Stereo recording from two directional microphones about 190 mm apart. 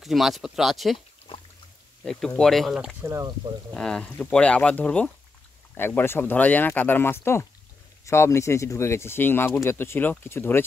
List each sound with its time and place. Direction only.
0.0 s speech: centre (ahead or behind)
0.9 s a sound: 30° left (ahead or behind)
2.0 s speech: 5° left (ahead or behind); by 3.3 s 15° right (ahead or behind)
3.7 s speech: 5° left (ahead or behind)